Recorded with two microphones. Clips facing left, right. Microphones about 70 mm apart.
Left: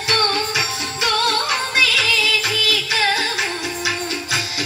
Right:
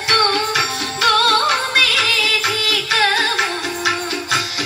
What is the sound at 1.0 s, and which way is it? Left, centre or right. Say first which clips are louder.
Music: right 5 dB; right.